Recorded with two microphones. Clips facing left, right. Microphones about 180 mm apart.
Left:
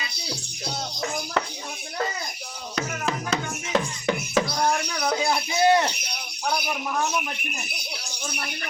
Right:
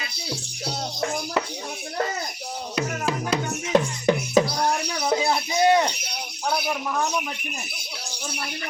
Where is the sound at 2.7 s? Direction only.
10° right (ahead or behind).